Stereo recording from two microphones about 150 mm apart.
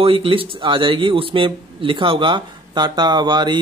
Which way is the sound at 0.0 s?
35° right (ahead or behind).